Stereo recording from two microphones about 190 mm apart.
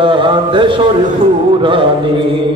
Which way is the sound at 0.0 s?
25° right (ahead or behind).